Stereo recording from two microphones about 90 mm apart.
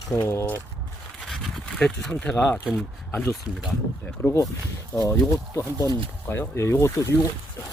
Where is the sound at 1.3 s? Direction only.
5° left (ahead or behind); by 3.3 s 25° left (ahead or behind).